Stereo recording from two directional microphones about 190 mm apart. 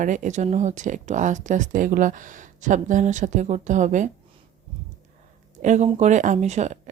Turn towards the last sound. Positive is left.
turn(degrees=-35)  # may be behind; listen again after turning